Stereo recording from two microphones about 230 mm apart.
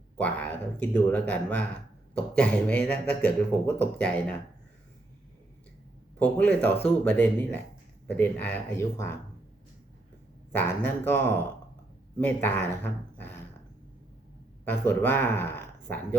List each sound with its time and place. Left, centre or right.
0.2 s speech: centre
6.1 s speech: centre
10.5 s speech: centre
14.6 s speech: centre